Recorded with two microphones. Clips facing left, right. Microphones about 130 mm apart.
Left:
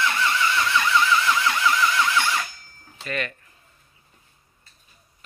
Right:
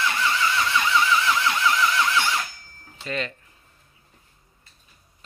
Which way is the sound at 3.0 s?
25° right (ahead or behind).